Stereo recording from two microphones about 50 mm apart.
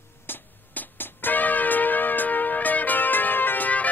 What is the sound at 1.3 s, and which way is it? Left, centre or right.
Music, left.